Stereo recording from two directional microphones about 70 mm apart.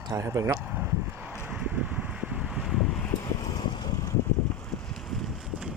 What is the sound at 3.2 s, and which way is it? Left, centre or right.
Vehicle, left.